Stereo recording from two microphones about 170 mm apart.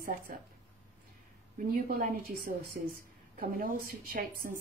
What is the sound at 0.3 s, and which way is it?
Speech, 50° right (ahead or behind).